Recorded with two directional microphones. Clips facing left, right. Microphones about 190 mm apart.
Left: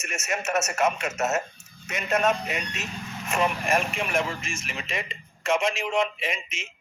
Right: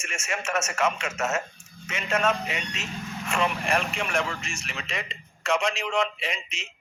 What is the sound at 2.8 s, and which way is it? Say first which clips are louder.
Speech: right 1 dB; 20° left (ahead or behind).